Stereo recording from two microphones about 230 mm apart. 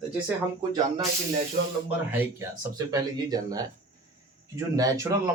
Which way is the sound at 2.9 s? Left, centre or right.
Centre.